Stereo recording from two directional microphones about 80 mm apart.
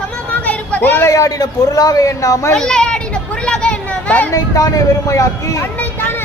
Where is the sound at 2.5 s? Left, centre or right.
Centre.